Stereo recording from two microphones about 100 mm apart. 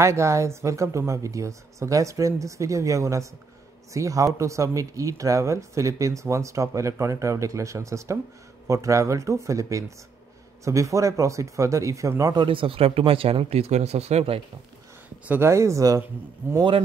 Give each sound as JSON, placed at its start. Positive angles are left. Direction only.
{"t": 0.0, "sound": "speech", "side_deg": -30}
{"t": 12.4, "sound": "speech", "side_deg": -60}
{"t": 15.2, "sound": "speech", "side_deg": -25}